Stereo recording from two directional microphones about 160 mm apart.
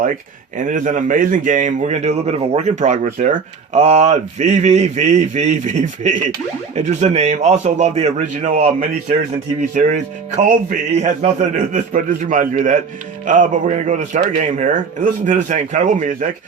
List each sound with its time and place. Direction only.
0.5 s a man's voice: 55° right (ahead or behind)